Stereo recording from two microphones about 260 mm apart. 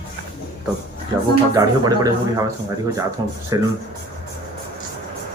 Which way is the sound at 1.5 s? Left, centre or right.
Centre.